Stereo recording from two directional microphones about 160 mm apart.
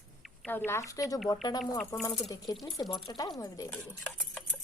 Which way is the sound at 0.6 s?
20° left (ahead or behind).